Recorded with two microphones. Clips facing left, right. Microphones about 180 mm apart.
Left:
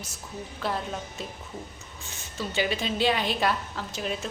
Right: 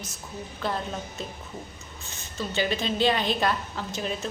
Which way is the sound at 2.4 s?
10° left (ahead or behind).